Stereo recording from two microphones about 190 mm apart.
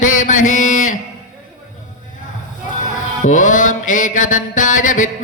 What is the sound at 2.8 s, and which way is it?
Music, 40° left (ahead or behind).